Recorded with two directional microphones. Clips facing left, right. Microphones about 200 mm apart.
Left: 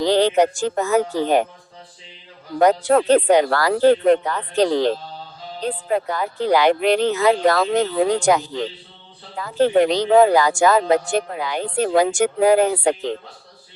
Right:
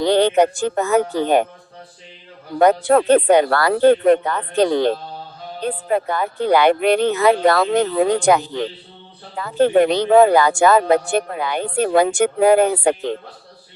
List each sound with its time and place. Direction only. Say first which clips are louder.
0.0 s speech: right 1 dB; 60° right (ahead or behind)
2.6 s speech: right 2 dB; 55° right (ahead or behind)
9.4 s speech: right 2 dB; 55° right (ahead or behind)